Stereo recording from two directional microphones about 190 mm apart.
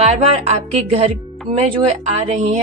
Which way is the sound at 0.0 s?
35° right (ahead or behind).